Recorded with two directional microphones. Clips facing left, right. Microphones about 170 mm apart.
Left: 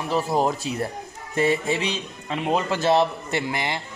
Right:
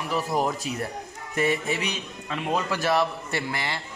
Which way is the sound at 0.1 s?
30° left (ahead or behind).